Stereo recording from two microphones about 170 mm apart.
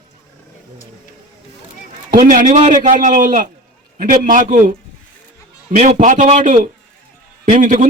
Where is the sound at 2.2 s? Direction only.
50° right (ahead or behind).